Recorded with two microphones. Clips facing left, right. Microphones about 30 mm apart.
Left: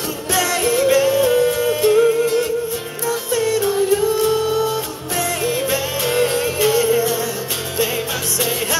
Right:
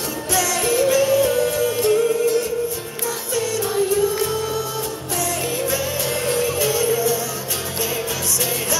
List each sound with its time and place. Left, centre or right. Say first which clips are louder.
0.3 s music: left 2 dB; left
3.6 s singing: left 2 dB; left
4.3 s music: left 6 dB; left